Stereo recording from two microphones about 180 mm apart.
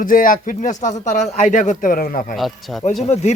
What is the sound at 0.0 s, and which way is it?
A man's voice, 50° left (ahead or behind).